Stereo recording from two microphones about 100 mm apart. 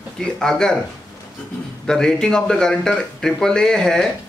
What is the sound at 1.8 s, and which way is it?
A man's voice, 5° left (ahead or behind).